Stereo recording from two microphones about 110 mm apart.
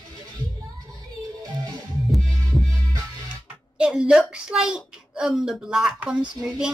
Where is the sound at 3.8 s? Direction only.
5° right (ahead or behind).